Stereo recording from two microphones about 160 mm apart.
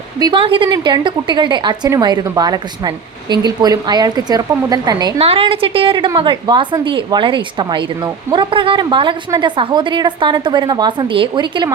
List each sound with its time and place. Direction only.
0.2 s a woman's voice: 30° right (ahead or behind)
5.1 s a woman's voice: 40° right (ahead or behind)